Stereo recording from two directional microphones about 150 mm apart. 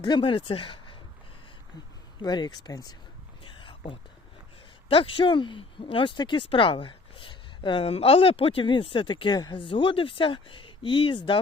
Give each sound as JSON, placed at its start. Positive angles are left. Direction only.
{"t": 0.0, "sound": "speech", "side_deg": 35}
{"t": 2.1, "sound": "speech", "side_deg": 30}
{"t": 3.4, "sound": "a sound", "side_deg": 35}
{"t": 4.9, "sound": "speech", "side_deg": 35}